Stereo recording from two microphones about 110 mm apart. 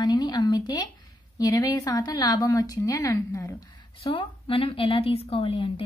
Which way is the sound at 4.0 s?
55° left (ahead or behind).